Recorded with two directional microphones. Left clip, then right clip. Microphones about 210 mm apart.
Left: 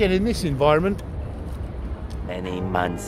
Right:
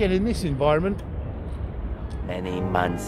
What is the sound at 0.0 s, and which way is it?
Speech, 10° left (ahead or behind).